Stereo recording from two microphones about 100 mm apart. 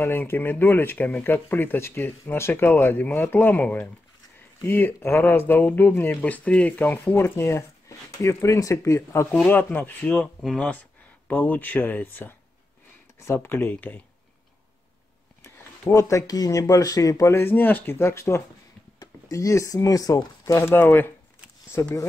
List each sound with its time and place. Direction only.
0.0 s speech: 20° left (ahead or behind)
7.3 s speech: 30° left (ahead or behind)
9.3 s speech: 15° left (ahead or behind)
10.4 s speech: 5° left (ahead or behind)
10.7 s speech: 15° left (ahead or behind)
15.9 s speech: 30° left (ahead or behind)